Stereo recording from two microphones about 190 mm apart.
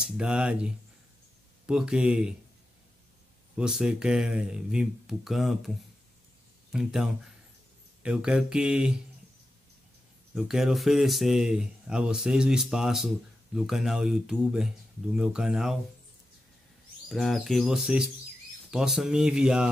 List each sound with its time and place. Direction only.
0.0 s speech: 5° right (ahead or behind)
3.5 s speech: 5° right (ahead or behind)
10.3 s speech: centre (ahead or behind)
17.1 s speech: centre (ahead or behind)